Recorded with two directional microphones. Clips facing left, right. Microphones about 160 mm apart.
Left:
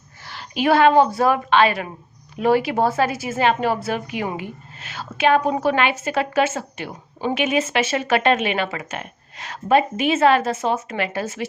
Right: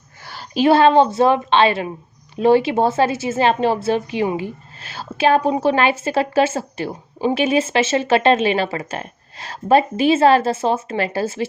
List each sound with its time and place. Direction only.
0.3 s a woman's voice: 30° right (ahead or behind)